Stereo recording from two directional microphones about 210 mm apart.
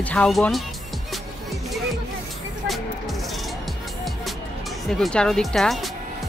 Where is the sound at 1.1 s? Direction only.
Centre (ahead or behind).